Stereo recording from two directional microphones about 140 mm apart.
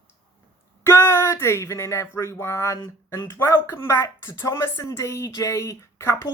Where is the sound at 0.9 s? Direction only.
20° left (ahead or behind).